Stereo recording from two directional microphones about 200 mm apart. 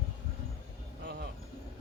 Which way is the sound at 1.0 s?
55° right (ahead or behind).